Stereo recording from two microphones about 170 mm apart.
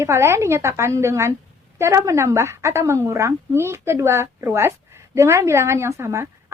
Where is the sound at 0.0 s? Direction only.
15° right (ahead or behind).